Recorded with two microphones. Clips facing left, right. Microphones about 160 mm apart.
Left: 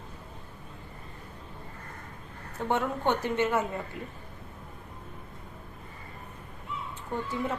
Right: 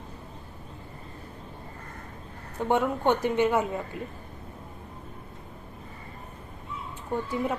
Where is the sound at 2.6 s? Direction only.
15° right (ahead or behind).